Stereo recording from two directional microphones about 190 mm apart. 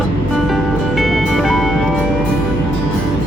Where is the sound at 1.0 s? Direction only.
Centre (ahead or behind).